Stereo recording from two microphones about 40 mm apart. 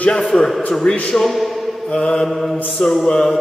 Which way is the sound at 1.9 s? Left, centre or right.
Centre.